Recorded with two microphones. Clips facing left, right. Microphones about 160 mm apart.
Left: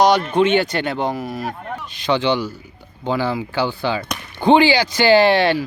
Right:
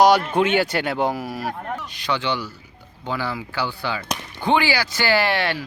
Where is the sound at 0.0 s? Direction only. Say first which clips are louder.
Left 1 dB; 5° right (ahead or behind).